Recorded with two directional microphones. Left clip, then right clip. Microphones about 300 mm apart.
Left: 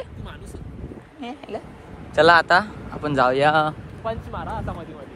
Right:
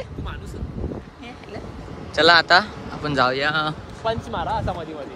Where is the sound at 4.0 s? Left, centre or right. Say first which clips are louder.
Right 5 dB; right.